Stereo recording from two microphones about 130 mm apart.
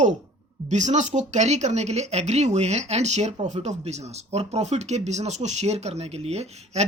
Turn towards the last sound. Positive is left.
turn(degrees=-55)  # may be behind; listen again after turning